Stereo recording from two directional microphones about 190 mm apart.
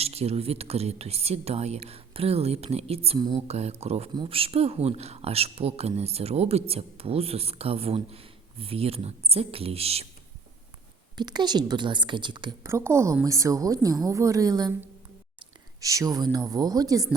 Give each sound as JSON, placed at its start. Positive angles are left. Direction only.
{"t": 0.0, "sound": "speech", "side_deg": -35}
{"t": 11.2, "sound": "a woman's voice", "side_deg": -20}
{"t": 15.8, "sound": "speech", "side_deg": -15}